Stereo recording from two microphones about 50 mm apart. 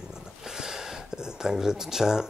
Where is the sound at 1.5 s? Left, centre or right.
Centre.